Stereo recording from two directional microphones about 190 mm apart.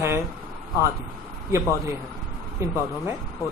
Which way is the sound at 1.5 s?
15° right (ahead or behind).